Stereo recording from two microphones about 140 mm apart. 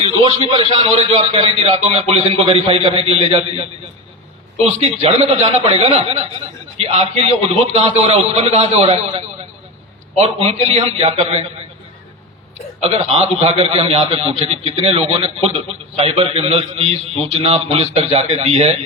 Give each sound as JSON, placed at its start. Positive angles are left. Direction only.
{"t": 0.2, "sound": "a man's voice", "side_deg": -35}
{"t": 12.8, "sound": "a man's voice", "side_deg": -45}